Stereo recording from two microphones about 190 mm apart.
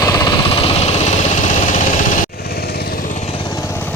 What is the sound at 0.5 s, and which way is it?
Engine, 30° left (ahead or behind).